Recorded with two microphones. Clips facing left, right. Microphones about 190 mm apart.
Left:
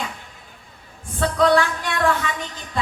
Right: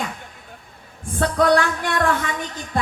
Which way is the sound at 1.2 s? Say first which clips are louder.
Even; 55° right (ahead or behind).